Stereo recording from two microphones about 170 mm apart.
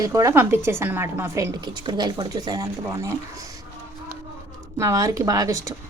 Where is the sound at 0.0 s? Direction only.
20° right (ahead or behind).